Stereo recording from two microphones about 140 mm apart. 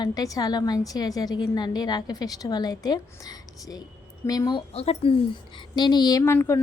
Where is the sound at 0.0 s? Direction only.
25° left (ahead or behind).